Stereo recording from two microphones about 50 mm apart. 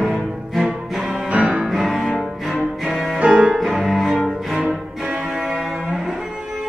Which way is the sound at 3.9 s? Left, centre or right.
Centre.